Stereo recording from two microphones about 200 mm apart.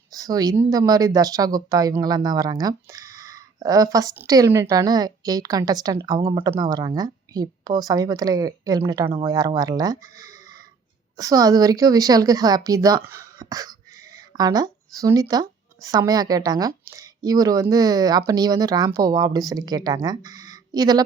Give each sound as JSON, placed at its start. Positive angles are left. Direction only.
{"t": 0.1, "sound": "speech", "side_deg": -20}